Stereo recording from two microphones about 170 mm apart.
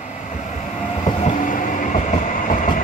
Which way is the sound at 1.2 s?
45° left (ahead or behind).